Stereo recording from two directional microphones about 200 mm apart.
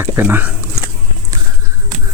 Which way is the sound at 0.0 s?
10° right (ahead or behind).